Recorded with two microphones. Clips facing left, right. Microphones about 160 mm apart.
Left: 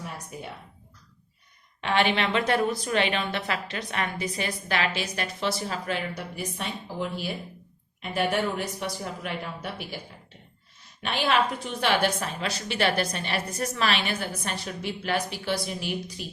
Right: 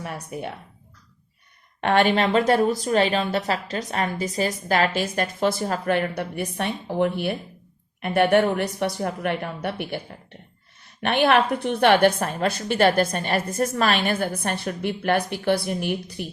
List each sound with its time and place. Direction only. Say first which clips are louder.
0.0 s speech: right 5 dB; 60° right (ahead or behind)
1.8 s a woman's voice: right 5 dB; 50° right (ahead or behind)
11.0 s a woman's voice: right 6 dB; 60° right (ahead or behind)